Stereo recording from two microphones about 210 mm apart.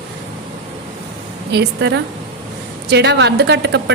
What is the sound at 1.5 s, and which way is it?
Speech, 55° right (ahead or behind).